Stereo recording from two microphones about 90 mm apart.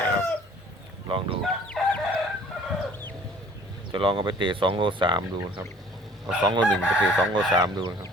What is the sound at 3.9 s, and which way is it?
Speech, 75° right (ahead or behind).